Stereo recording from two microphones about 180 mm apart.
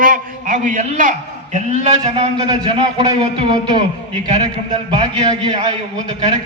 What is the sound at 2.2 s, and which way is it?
Speech, 30° right (ahead or behind).